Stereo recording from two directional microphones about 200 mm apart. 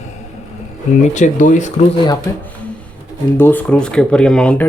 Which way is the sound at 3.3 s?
10° left (ahead or behind).